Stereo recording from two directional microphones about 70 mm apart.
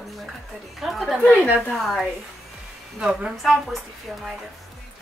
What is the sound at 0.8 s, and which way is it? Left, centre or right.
A woman's voice, centre.